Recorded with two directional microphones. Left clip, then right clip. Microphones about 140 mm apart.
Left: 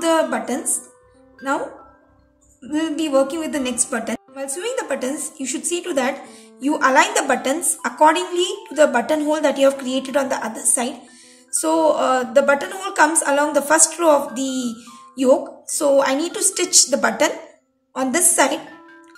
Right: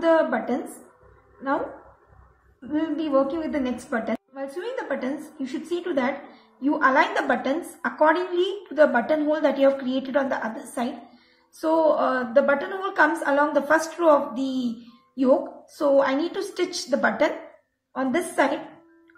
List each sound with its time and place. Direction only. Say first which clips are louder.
0.0 s a woman's voice: left 2 dB; 15° left (ahead or behind)
2.7 s a woman's voice: left 4 dB; 20° left (ahead or behind)